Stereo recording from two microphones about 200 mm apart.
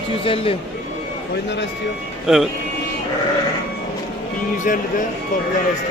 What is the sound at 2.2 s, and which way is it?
Speech, centre (ahead or behind).